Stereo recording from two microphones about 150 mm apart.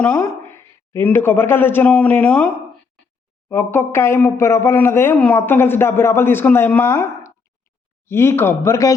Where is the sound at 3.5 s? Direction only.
15° left (ahead or behind).